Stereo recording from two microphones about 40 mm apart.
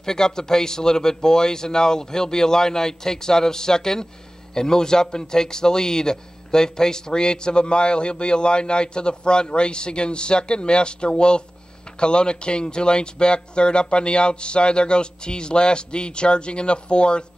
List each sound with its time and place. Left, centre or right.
0.0 s a man's voice: centre